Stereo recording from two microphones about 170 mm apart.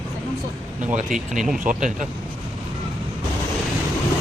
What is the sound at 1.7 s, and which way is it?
Speech, 45° right (ahead or behind).